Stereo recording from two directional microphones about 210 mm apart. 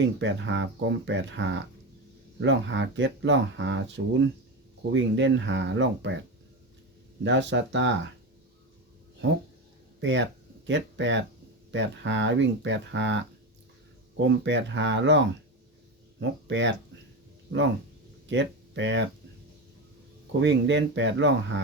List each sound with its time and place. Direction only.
0.2 s speech: 60° right (ahead or behind)
7.3 s speech: 60° right (ahead or behind)
10.0 s speech: 60° right (ahead or behind)
16.5 s speech: 60° right (ahead or behind)
18.3 s speech: 60° right (ahead or behind)
20.4 s speech: 60° right (ahead or behind)